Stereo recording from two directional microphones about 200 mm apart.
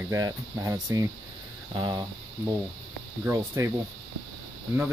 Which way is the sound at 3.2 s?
15° right (ahead or behind).